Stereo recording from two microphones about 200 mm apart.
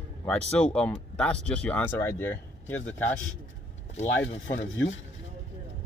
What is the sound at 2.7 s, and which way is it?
Speech, 75° left (ahead or behind).